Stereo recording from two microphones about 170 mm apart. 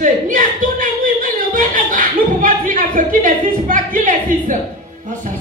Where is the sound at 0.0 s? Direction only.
50° right (ahead or behind).